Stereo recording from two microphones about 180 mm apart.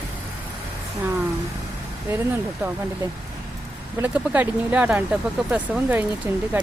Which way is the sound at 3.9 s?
10° right (ahead or behind).